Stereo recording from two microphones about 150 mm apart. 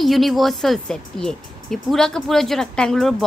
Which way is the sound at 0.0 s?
Centre (ahead or behind).